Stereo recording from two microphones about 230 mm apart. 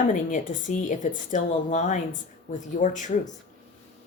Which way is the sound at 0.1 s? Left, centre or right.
Left.